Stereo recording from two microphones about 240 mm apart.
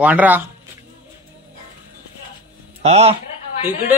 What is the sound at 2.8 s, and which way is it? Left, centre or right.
Speech, right.